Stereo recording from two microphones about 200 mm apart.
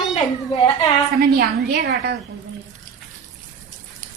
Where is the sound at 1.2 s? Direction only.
50° right (ahead or behind).